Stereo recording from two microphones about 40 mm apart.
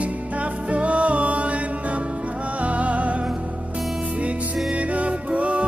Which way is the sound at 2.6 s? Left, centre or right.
Right.